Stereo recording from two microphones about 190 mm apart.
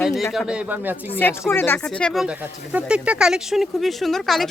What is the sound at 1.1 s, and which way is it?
Speech, 10° left (ahead or behind).